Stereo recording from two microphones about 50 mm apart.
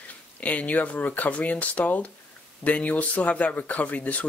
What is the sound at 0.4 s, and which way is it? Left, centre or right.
Speech, left.